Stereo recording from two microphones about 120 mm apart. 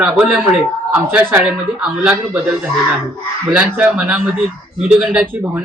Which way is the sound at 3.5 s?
5° right (ahead or behind).